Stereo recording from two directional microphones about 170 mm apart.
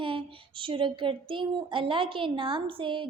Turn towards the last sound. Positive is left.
turn(degrees=-30)  # may be behind; listen again after turning